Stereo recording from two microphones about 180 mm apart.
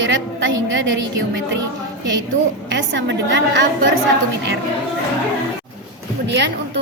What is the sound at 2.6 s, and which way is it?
Speech, 90° right.